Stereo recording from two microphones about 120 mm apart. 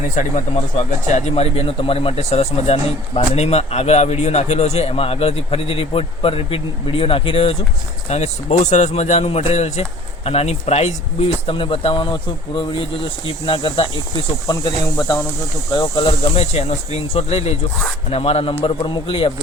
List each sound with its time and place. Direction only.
0.2 s speech: 85° left; by 7.5 s 50° left (ahead or behind)
8.1 s speech: 70° left (ahead or behind); by 13.8 s 45° left (ahead or behind)
14.4 s speech: 35° left (ahead or behind); by 19.3 s 50° left (ahead or behind)